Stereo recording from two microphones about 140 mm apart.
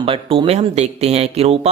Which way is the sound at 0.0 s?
40° right (ahead or behind).